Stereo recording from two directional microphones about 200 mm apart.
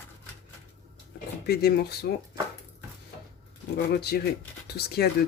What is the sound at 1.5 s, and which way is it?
Speech, 50° left (ahead or behind).